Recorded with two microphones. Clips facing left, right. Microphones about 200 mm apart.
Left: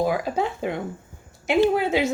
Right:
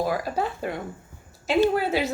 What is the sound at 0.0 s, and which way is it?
A woman's voice, 20° left (ahead or behind).